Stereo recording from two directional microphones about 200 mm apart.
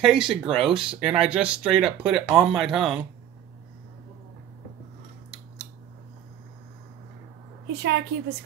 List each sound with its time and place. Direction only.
0.0 s speech: centre (ahead or behind)
7.8 s a woman's voice: 60° right (ahead or behind)